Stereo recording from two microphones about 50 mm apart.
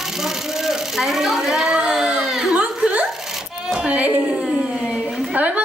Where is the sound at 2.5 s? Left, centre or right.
Right.